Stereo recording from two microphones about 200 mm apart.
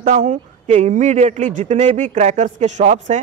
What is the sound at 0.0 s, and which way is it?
Speech, 35° right (ahead or behind).